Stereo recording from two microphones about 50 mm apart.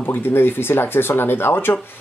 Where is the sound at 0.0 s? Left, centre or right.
Left.